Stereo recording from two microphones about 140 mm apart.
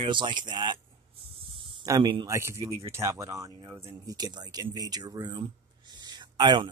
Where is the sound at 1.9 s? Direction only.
25° right (ahead or behind).